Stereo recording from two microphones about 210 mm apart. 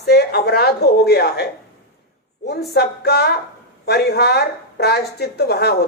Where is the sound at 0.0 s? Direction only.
50° left (ahead or behind).